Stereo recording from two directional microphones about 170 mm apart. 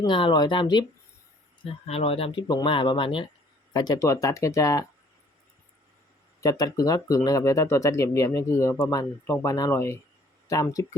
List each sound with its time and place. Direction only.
0.0 s speech: 30° left (ahead or behind)
6.4 s speech: 20° left (ahead or behind)